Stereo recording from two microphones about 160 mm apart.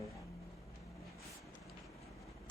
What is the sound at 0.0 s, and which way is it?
Vehicle, 20° left (ahead or behind).